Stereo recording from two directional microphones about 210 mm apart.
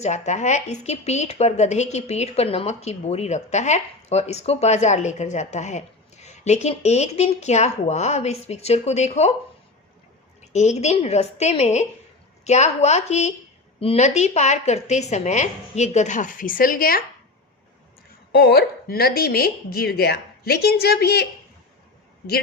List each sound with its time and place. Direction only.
0.0 s a woman's voice: 35° left (ahead or behind)
10.4 s a woman's voice: 30° left (ahead or behind)
18.3 s a woman's voice: 50° left (ahead or behind)